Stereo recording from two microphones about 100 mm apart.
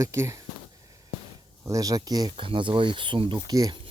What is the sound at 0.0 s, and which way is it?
Speech, 30° right (ahead or behind).